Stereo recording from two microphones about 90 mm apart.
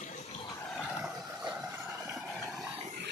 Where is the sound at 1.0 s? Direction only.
5° right (ahead or behind).